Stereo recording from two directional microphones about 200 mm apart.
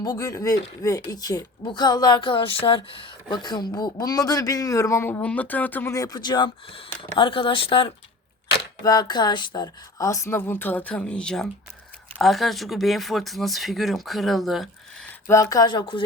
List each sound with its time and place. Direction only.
0.0 s a woman's voice: 15° left (ahead or behind); by 14.7 s centre (ahead or behind)
15.3 s a woman's voice: 15° left (ahead or behind)